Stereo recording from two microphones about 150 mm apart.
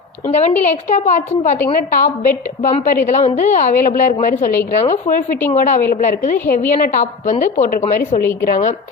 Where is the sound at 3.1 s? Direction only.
60° left (ahead or behind).